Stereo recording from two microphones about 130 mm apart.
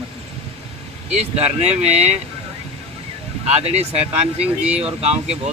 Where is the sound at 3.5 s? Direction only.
55° right (ahead or behind).